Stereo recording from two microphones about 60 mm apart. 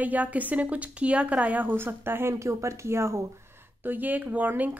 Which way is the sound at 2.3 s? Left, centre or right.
Right.